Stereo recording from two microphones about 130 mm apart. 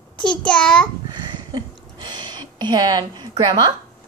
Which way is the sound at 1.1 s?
35° right (ahead or behind).